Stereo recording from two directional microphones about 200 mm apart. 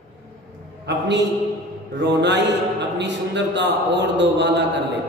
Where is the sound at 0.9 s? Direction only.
60° right (ahead or behind).